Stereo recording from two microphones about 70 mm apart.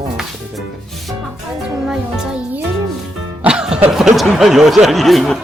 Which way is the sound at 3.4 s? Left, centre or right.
Centre.